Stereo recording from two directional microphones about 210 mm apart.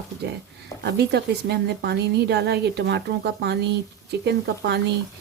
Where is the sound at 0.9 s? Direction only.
50° right (ahead or behind).